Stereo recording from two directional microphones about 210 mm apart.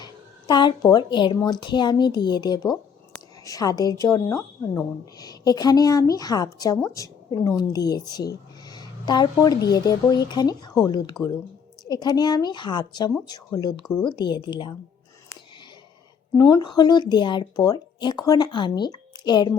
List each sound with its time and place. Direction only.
0.0 s a woman's voice: 20° left (ahead or behind)
16.3 s speech: 15° left (ahead or behind)